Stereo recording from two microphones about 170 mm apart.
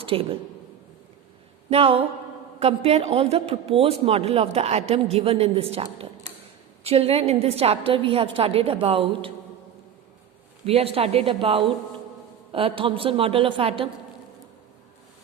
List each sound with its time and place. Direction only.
0.0 s speech: 35° right (ahead or behind)
1.7 s a man's voice: 35° right (ahead or behind)
10.7 s a man's voice: 35° right (ahead or behind)